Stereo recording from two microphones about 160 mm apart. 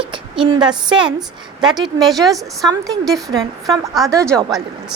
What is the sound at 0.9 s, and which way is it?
A woman's voice, 5° right (ahead or behind).